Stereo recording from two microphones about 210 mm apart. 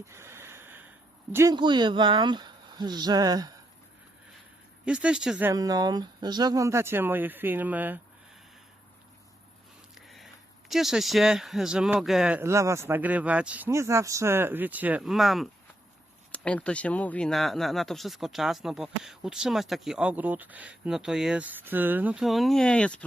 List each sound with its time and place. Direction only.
0.1 s snort: 10° right (ahead or behind)
1.3 s speech: 15° right (ahead or behind)
4.9 s speech: 5° right (ahead or behind)
5.5 s speech: 15° right (ahead or behind)
9.9 s speech: centre (ahead or behind)